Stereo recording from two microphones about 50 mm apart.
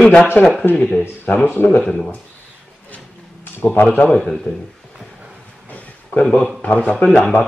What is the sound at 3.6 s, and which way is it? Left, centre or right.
Speech, left.